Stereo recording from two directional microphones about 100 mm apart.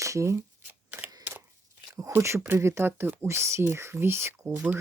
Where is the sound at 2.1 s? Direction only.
25° right (ahead or behind).